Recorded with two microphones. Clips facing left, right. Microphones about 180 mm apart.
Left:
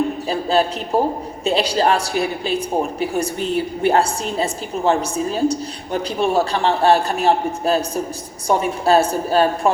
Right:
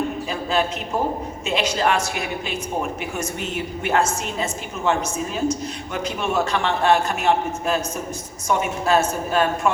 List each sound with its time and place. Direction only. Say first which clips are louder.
0.5 s a woman's voice: left 5 dB; 35° left (ahead or behind)